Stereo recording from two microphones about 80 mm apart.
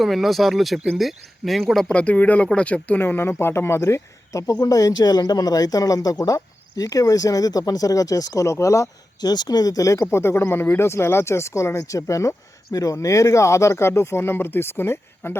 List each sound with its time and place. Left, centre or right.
0.0 s speech: centre
1.9 s speech: centre; by 9.3 s left
9.3 s speech: left
10.1 s speech: left